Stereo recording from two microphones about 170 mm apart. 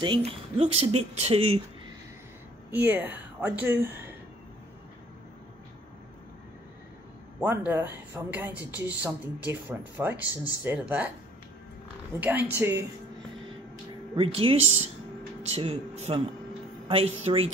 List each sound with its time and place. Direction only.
0.0 s speech: 30° right (ahead or behind)
2.7 s speech: 10° right (ahead or behind)
7.3 s speech: 10° right (ahead or behind)
12.2 s speech: 10° right (ahead or behind)
14.1 s speech: 35° right (ahead or behind)